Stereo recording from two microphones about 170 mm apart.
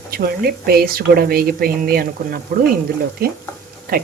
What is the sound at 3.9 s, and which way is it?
Speech, 55° right (ahead or behind).